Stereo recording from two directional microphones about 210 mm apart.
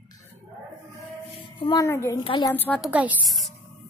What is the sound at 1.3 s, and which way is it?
Speech, 20° left (ahead or behind).